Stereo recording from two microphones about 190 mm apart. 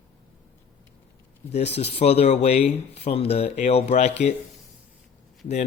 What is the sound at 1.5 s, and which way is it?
Speech, 35° left (ahead or behind).